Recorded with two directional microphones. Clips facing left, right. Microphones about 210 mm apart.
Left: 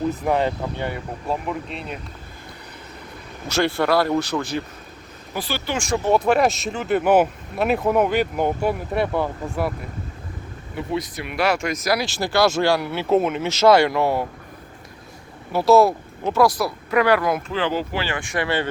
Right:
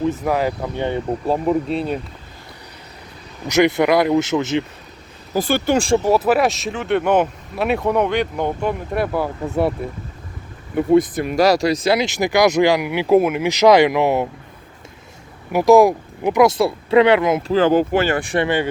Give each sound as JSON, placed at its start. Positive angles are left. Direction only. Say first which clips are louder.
{"t": 0.3, "sound": "speech", "louder": "even", "side_deg": -5}
{"t": 0.8, "sound": "speech", "louder": "right 7 dB", "side_deg": -25}
{"t": 3.4, "sound": "speech", "louder": "right 6 dB", "side_deg": -20}
{"t": 5.3, "sound": "speech", "louder": "right 9 dB", "side_deg": -50}
{"t": 6.0, "sound": "speech", "louder": "right 2 dB", "side_deg": -5}
{"t": 10.8, "sound": "speech", "louder": "right 12 dB", "side_deg": -50}
{"t": 15.5, "sound": "speech", "louder": "right 4 dB", "side_deg": -15}
{"t": 17.5, "sound": "speech", "louder": "right 9 dB", "side_deg": -45}
{"t": 18.4, "sound": "speech", "louder": "right 4 dB", "side_deg": -15}